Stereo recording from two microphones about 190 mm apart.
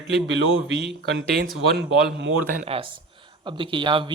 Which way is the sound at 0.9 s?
65° right (ahead or behind).